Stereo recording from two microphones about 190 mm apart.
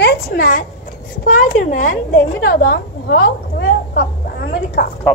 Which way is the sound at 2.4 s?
60° left (ahead or behind).